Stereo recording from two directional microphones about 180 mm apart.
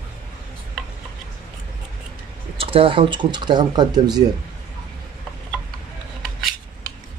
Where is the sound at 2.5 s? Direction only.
30° right (ahead or behind).